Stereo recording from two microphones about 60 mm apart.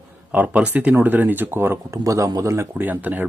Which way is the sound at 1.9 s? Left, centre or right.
Right.